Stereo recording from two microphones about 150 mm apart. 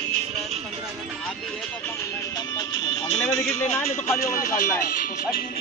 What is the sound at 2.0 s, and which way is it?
Speech, 25° left (ahead or behind).